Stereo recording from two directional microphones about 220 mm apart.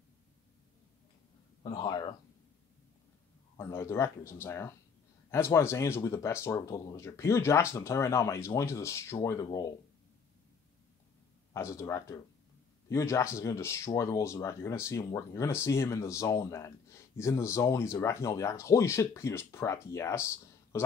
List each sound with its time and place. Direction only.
1.6 s speech: 20° left (ahead or behind)
3.5 s speech: 10° left (ahead or behind)
11.5 s speech: 15° left (ahead or behind)